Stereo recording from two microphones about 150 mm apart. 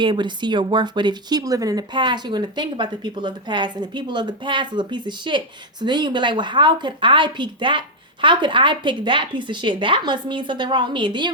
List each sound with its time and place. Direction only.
0.0 s speech: 30° right (ahead or behind)